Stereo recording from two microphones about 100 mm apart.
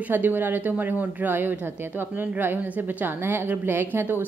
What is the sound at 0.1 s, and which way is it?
A woman's voice, 20° right (ahead or behind).